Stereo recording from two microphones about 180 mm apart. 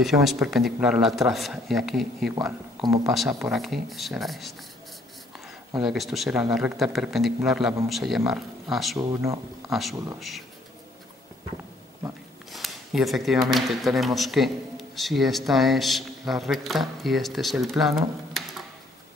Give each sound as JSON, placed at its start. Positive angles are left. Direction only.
{"t": 0.0, "sound": "a man's voice", "side_deg": 0}
{"t": 2.8, "sound": "speech", "side_deg": -20}
{"t": 3.1, "sound": "a man's voice", "side_deg": 0}
{"t": 5.8, "sound": "a man's voice", "side_deg": 0}
{"t": 12.5, "sound": "a sound", "side_deg": 0}
{"t": 13.5, "sound": "a man's voice", "side_deg": 0}